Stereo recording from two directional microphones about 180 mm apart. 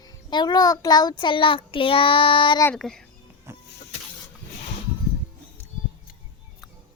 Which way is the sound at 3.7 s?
70° left (ahead or behind).